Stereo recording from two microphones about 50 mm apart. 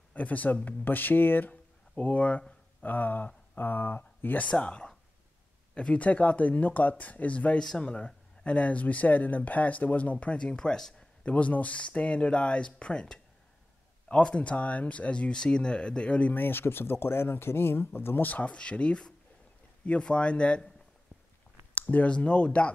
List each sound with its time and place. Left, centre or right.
0.1 s speech: left
2.0 s speech: left
4.4 s speech: left
7.5 s speech: centre; by 10.1 s left
10.2 s speech: left
11.2 s speech: left
16.4 s speech: left
18.3 s speech: left
21.7 s a sound: left
22.1 s speech: left